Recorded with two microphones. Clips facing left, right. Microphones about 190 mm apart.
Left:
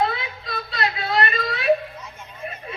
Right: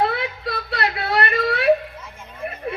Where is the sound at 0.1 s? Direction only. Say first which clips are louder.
Right 5 dB; 65° right (ahead or behind).